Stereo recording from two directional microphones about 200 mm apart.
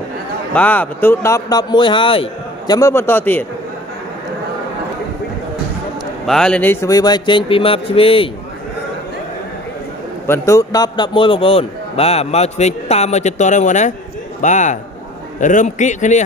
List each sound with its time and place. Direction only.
0.6 s a man's voice: 10° left (ahead or behind)
6.2 s speech: 5° left (ahead or behind); by 8.3 s 30° left (ahead or behind)
10.2 s a man's voice: 15° left (ahead or behind); by 16.2 s 35° left (ahead or behind)